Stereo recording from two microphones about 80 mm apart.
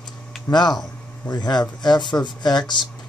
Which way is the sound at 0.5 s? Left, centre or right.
Left.